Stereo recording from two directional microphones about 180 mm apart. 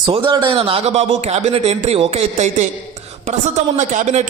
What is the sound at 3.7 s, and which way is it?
Speech, 40° right (ahead or behind).